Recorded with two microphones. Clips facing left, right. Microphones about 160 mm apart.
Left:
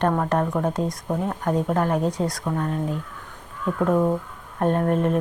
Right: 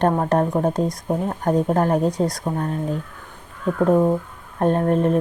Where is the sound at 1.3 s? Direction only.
35° right (ahead or behind).